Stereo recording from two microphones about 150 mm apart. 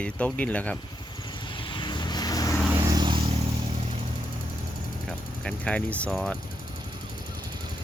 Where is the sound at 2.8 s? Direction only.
25° right (ahead or behind).